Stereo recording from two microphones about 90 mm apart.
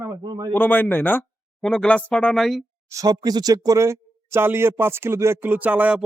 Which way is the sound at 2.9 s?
40° right (ahead or behind).